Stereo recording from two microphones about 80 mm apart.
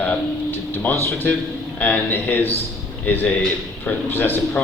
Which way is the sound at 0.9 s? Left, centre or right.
Left.